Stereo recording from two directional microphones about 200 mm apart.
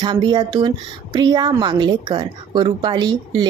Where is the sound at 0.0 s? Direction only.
20° right (ahead or behind).